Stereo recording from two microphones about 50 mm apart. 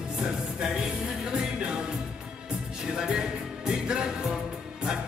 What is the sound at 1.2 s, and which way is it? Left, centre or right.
Music, centre.